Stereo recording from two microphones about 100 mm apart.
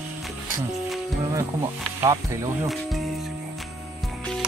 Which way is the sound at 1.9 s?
30° right (ahead or behind).